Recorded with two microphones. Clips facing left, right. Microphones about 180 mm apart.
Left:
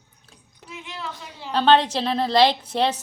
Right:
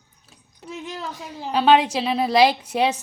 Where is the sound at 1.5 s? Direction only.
10° right (ahead or behind).